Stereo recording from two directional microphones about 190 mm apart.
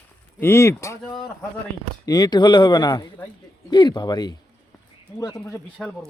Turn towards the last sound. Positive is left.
turn(degrees=15)  # may be behind; listen again after turning